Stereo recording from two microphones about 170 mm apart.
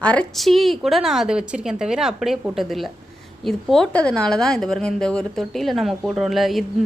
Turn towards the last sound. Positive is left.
turn(degrees=0)  # may be behind; listen again after turning